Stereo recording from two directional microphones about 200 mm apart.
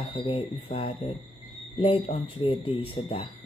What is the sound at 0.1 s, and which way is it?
Speech, 25° left (ahead or behind).